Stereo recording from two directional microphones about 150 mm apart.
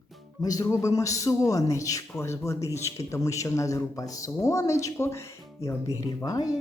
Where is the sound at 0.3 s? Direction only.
25° left (ahead or behind).